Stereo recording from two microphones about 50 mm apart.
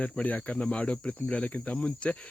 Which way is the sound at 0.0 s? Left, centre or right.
Left.